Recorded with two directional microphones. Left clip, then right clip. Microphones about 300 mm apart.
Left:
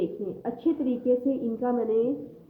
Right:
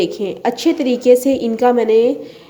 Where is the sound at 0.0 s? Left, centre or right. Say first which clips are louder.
Right 13 dB; right.